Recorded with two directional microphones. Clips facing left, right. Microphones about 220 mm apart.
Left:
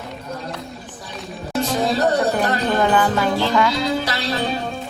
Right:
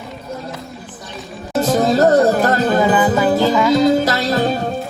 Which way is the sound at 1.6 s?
45° right (ahead or behind).